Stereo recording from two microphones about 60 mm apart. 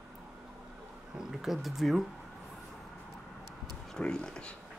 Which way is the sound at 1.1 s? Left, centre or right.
Centre.